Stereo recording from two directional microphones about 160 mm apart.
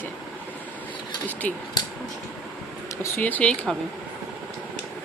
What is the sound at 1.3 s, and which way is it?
Speech, 10° left (ahead or behind).